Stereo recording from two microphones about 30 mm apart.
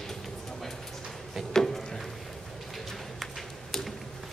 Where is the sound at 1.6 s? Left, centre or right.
Centre.